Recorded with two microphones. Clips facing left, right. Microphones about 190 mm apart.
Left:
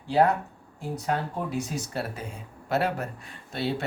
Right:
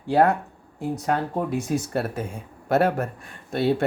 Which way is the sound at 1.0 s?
55° right (ahead or behind).